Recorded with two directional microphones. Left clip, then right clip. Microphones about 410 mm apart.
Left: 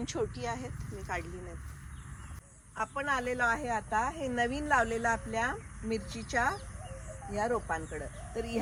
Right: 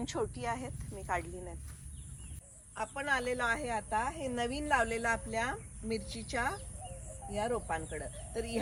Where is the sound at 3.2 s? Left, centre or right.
Centre.